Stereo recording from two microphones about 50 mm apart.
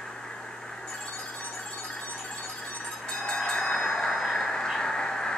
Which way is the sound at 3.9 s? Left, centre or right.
Centre.